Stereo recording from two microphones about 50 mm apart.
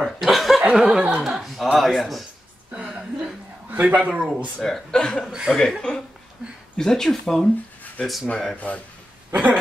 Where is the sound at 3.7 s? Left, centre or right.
Right.